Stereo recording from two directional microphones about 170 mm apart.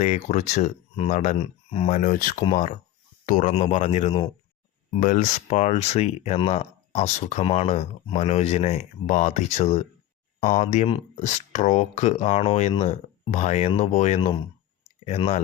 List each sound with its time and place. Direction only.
0.0 s speech: 45° left (ahead or behind)